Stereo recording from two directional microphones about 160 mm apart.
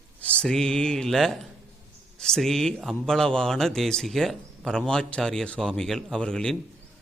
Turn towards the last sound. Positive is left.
turn(degrees=5)  # may be behind; listen again after turning